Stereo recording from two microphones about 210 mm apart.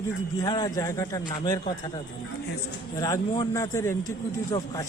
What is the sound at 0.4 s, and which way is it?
Speech, 15° left (ahead or behind).